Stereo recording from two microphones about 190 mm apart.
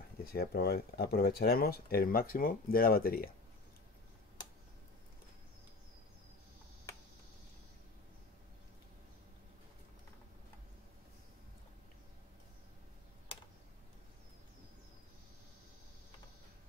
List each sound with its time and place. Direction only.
0.2 s speech: 55° left (ahead or behind)